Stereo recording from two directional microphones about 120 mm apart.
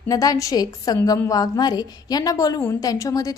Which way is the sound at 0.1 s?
30° left (ahead or behind).